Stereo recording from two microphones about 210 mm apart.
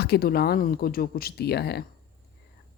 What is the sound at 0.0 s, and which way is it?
Speech, 50° left (ahead or behind).